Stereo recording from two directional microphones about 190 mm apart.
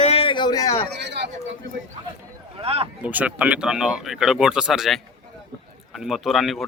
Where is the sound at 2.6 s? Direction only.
30° right (ahead or behind).